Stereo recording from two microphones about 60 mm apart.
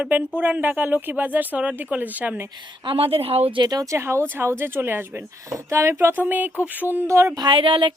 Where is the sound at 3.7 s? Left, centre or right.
Right.